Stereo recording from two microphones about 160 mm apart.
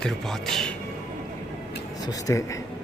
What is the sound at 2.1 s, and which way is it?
Speech, 20° left (ahead or behind).